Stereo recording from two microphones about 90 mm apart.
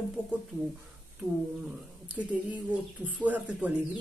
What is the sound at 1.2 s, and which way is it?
Speech, 30° right (ahead or behind).